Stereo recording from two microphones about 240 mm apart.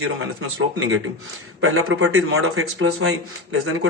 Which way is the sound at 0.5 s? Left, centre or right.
Right.